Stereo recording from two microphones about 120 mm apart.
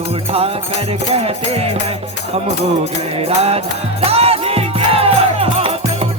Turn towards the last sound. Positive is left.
turn(degrees=-55)  # may be behind; listen again after turning